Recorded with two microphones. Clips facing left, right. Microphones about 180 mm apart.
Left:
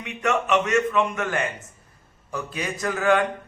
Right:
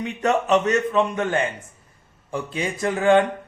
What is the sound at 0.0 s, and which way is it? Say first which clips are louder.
A man's voice: right 3 dB; 35° right (ahead or behind).